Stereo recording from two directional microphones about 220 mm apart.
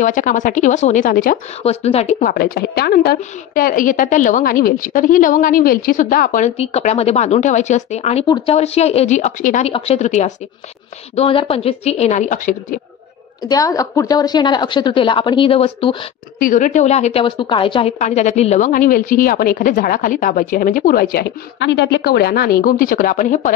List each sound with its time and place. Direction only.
0.0 s a woman's voice: 35° left (ahead or behind)
13.5 s a woman's voice: 15° left (ahead or behind)
16.3 s speech: 35° left (ahead or behind)